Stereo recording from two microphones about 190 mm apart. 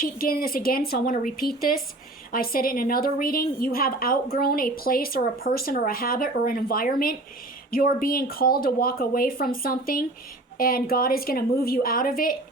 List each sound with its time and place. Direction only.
0.0 s a woman's voice: 50° left (ahead or behind)